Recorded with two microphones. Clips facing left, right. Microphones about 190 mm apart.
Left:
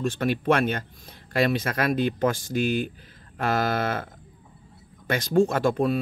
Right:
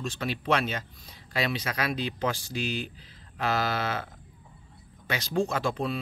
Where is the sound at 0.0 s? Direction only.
50° left (ahead or behind).